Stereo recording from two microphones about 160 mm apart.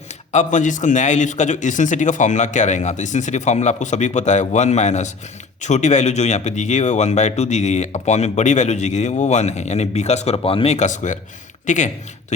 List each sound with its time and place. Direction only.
0.3 s speech: 50° left (ahead or behind)